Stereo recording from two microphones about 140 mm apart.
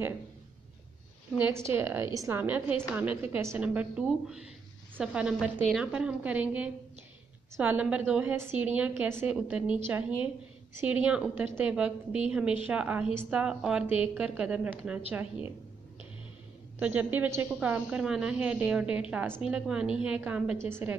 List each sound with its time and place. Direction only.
1.4 s a woman's voice: 15° right (ahead or behind)
13.8 s a woman's voice: 45° left (ahead or behind)
14.1 s a woman's voice: 10° right (ahead or behind)
16.8 s a woman's voice: 15° right (ahead or behind)